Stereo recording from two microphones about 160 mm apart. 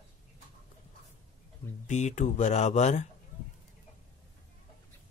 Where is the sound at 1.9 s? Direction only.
45° left (ahead or behind).